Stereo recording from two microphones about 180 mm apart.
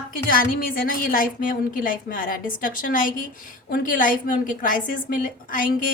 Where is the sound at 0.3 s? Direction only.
50° left (ahead or behind).